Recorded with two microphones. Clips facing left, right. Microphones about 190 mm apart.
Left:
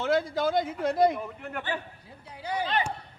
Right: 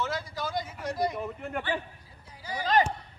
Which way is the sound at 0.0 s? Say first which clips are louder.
Left 8 dB; 55° left (ahead or behind).